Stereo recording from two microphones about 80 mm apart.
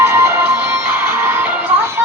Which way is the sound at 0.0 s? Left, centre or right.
Right.